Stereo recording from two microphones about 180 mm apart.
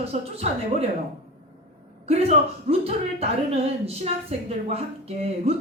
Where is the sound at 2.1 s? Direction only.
35° right (ahead or behind).